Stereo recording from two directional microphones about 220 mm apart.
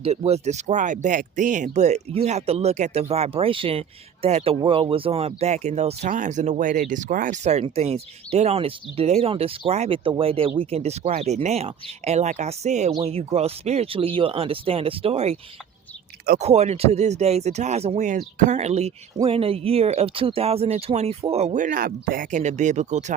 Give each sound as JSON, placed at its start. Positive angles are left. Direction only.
{"t": 0.0, "sound": "speech", "side_deg": -30}
{"t": 16.4, "sound": "speech", "side_deg": -30}